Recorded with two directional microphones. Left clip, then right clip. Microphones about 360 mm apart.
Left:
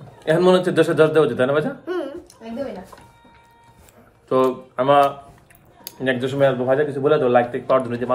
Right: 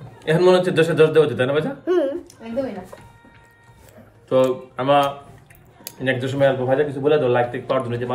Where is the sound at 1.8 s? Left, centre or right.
Centre.